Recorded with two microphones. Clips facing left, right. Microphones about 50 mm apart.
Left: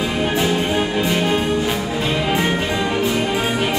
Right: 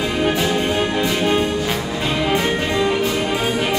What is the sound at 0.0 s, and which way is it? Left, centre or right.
Music, centre.